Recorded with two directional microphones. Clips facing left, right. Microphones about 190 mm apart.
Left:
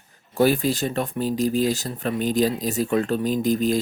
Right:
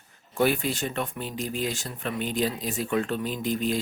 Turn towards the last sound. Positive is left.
turn(degrees=40)  # may be behind; listen again after turning